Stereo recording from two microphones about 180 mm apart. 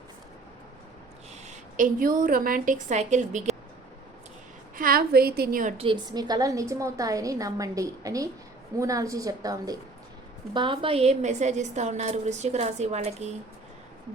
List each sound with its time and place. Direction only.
1.5 s a woman's voice: 45° right (ahead or behind)
4.8 s a woman's voice: 55° right (ahead or behind)
5.7 s a woman's voice: 30° right (ahead or behind)